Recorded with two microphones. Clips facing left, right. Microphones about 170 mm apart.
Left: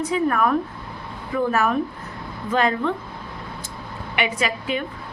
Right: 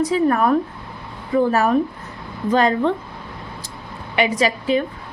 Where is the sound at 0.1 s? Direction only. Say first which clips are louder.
Right 4 dB; 35° right (ahead or behind).